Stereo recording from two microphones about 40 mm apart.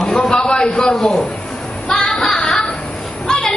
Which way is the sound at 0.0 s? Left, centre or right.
Left.